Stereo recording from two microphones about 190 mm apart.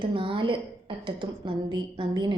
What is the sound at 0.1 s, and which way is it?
A woman's voice, 25° right (ahead or behind).